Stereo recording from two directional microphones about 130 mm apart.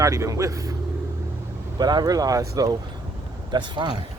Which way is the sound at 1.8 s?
30° right (ahead or behind).